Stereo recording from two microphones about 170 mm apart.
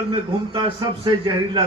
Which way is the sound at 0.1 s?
30° right (ahead or behind).